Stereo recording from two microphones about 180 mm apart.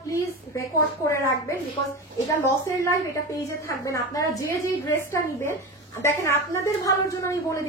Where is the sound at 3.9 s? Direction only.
20° left (ahead or behind).